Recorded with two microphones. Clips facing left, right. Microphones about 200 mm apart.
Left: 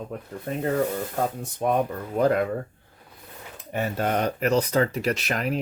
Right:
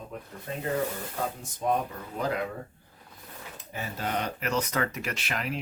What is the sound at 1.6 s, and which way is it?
Speech, 65° left (ahead or behind).